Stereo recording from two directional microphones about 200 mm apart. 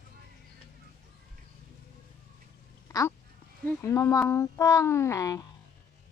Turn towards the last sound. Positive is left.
turn(degrees=15)  # may be behind; listen again after turning